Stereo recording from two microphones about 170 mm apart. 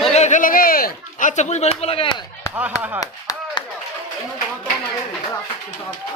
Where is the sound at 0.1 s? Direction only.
45° left (ahead or behind).